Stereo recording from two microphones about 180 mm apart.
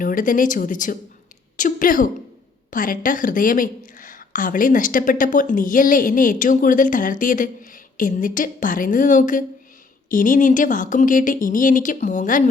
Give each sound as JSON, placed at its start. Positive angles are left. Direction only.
{"t": 0.0, "sound": "speech", "side_deg": 50}